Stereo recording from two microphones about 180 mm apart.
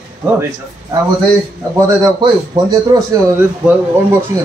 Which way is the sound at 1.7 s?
20° right (ahead or behind).